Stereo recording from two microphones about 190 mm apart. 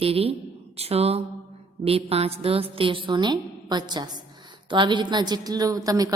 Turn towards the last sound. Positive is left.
turn(degrees=-20)  # may be behind; listen again after turning